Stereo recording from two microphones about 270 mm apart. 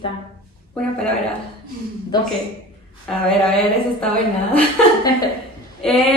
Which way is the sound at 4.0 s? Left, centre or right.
Centre.